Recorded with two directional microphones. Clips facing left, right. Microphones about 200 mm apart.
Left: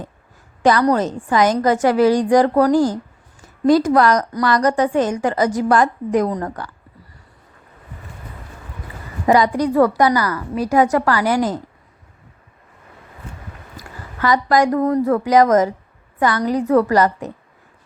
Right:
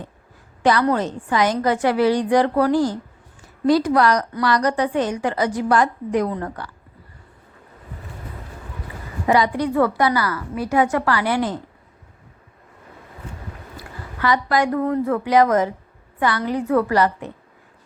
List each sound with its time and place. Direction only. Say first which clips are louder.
0.6 s a woman's voice: left 3 dB; 45° left (ahead or behind)
9.2 s a woman's voice: left 3 dB; 45° left (ahead or behind)
13.7 s a woman's voice: left 3 dB; 45° left (ahead or behind)